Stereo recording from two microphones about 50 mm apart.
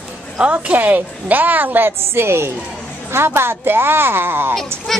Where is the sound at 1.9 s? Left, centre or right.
Right.